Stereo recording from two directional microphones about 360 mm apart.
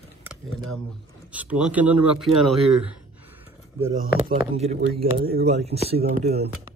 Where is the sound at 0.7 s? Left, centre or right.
Centre.